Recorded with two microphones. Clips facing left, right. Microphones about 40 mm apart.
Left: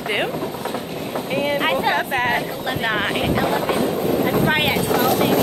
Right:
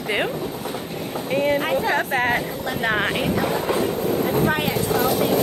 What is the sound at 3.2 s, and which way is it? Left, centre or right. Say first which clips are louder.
Speech: left 2 dB; left.